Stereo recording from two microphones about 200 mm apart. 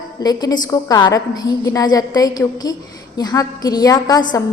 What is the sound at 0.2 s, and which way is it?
A woman's voice, 20° left (ahead or behind).